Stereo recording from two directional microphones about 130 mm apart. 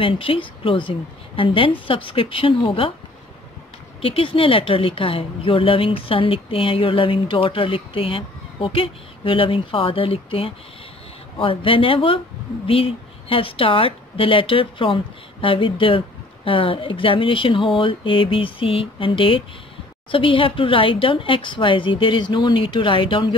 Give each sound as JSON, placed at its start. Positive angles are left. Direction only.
{"t": 0.0, "sound": "a woman's voice", "side_deg": 45}
{"t": 4.0, "sound": "a woman's voice", "side_deg": 45}